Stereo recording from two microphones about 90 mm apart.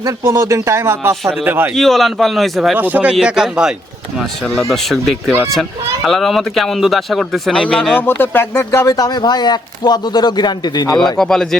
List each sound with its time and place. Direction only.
0.2 s speech: 30° right (ahead or behind)
1.2 s speech: centre (ahead or behind)
1.5 s speech: 25° right (ahead or behind)
1.7 s speech: 5° left (ahead or behind)
2.7 s speech: 20° right (ahead or behind)
3.1 s speech: 10° right (ahead or behind); by 7.9 s 10° left (ahead or behind)
7.9 s speech: 25° left (ahead or behind)
8.9 s speech: 50° left (ahead or behind)
11.0 s speech: 5° left (ahead or behind)